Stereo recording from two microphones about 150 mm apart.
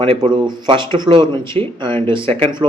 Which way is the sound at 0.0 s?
35° right (ahead or behind).